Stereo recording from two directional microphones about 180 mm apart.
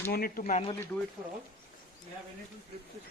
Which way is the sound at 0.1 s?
55° left (ahead or behind).